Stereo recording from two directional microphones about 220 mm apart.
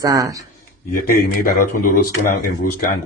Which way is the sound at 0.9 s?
40° left (ahead or behind).